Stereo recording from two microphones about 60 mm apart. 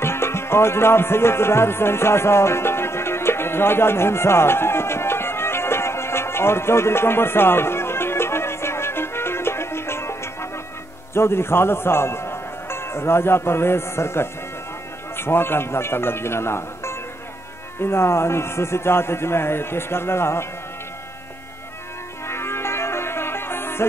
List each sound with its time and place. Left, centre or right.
0.0 s music: left
11.1 s a man's voice: left
22.3 s music: left